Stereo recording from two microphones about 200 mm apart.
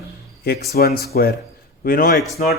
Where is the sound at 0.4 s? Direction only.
50° left (ahead or behind).